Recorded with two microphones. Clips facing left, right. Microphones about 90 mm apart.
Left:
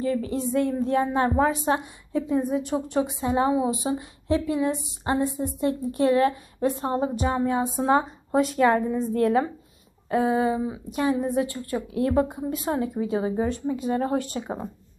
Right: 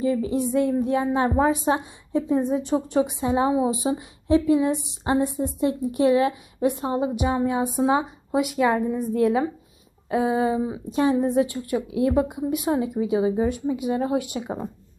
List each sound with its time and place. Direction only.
0.0 s a woman's voice: 20° right (ahead or behind)
10.0 s a woman's voice: 20° right (ahead or behind)